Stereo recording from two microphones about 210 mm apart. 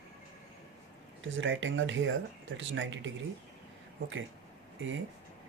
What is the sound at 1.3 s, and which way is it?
Speech, 65° right (ahead or behind).